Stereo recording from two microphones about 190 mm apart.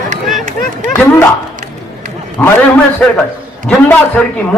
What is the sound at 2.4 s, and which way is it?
Speech, 5° left (ahead or behind).